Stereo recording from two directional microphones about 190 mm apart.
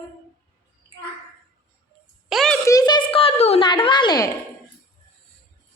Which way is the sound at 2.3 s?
Centre (ahead or behind).